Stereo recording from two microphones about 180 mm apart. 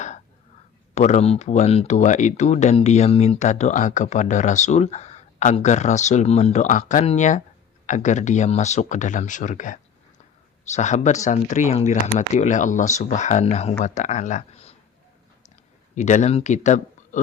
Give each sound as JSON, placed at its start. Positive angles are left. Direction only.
{"t": 0.9, "sound": "speech", "side_deg": 40}
{"t": 16.0, "sound": "speech", "side_deg": 40}